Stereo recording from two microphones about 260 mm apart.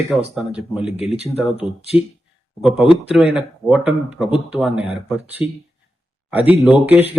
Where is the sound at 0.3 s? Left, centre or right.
Centre.